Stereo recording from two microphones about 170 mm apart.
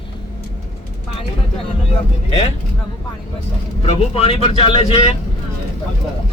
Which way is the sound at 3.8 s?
35° left (ahead or behind).